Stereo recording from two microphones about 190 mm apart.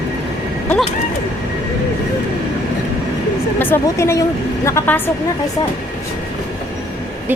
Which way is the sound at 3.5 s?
10° left (ahead or behind).